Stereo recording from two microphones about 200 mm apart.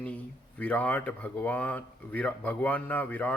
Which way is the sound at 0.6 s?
5° left (ahead or behind).